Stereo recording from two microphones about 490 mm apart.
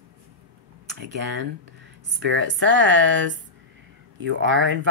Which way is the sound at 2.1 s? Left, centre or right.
Right.